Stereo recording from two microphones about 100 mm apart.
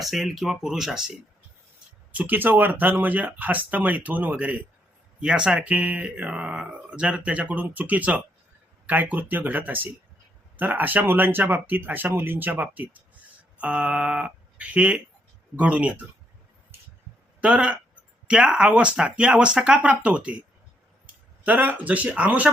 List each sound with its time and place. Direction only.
0.0 s speech: centre (ahead or behind)
2.1 s speech: 20° right (ahead or behind)
17.4 s speech: 10° right (ahead or behind)
21.4 s speech: 15° right (ahead or behind)